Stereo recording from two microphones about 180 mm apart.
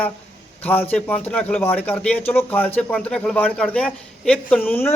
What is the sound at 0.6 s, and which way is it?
A man's voice, 10° left (ahead or behind).